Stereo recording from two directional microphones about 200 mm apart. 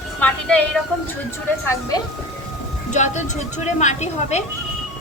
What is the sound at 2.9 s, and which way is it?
A woman's voice, 35° left (ahead or behind).